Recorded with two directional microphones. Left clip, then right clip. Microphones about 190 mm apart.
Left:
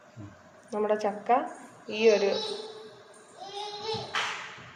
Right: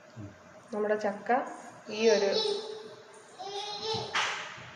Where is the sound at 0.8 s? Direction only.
40° left (ahead or behind).